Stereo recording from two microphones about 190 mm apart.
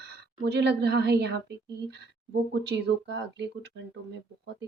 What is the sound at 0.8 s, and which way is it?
Speech, 60° right (ahead or behind).